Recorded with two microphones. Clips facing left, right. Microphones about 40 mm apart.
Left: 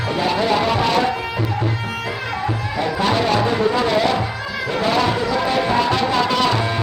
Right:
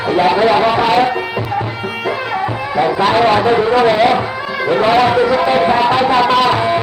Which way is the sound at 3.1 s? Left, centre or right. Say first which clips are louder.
Right 6 dB; right.